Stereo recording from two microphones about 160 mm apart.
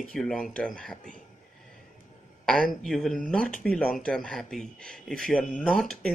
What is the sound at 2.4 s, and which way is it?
Speech, 5° left (ahead or behind).